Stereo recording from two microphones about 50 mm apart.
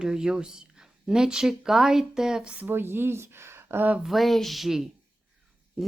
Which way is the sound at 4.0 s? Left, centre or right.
Centre.